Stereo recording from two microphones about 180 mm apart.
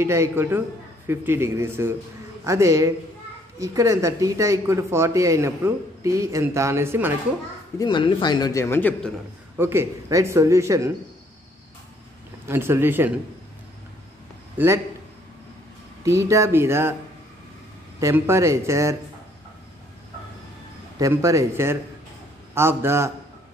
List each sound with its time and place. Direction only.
0.0 s speech: 15° right (ahead or behind)
7.8 s a man's voice: 25° left (ahead or behind); by 9.1 s 10° left (ahead or behind)
9.6 s speech: 15° right (ahead or behind)
12.4 s speech: 15° right (ahead or behind)
16.0 s speech: 15° right (ahead or behind)
18.0 s speech: 15° right (ahead or behind)
21.0 s speech: 15° right (ahead or behind)